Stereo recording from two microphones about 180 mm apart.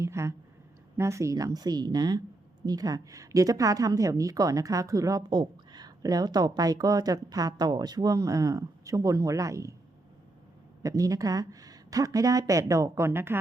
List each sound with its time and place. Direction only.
0.0 s a sound: 15° right (ahead or behind)
0.9 s a woman's voice: 15° right (ahead or behind)
10.8 s a woman's voice: 20° right (ahead or behind)